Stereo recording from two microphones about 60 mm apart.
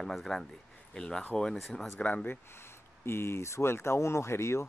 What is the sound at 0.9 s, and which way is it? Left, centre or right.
Speech, centre.